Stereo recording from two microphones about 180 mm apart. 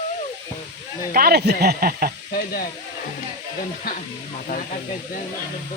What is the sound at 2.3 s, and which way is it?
Speech, 55° left (ahead or behind).